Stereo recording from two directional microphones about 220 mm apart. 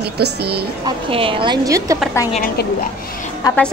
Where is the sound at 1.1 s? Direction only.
25° right (ahead or behind).